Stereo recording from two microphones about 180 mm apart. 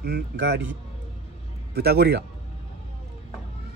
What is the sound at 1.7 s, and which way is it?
Speech, 60° right (ahead or behind).